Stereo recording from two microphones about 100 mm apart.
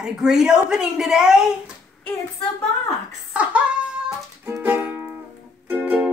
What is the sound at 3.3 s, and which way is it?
Speech, 15° right (ahead or behind).